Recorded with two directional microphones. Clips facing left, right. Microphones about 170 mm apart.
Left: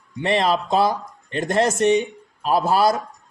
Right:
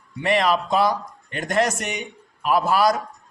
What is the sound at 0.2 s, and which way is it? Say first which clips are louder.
A man's voice: even; 30° left (ahead or behind).